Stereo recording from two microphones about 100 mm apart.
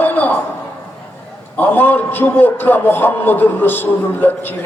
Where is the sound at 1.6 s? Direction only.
20° left (ahead or behind).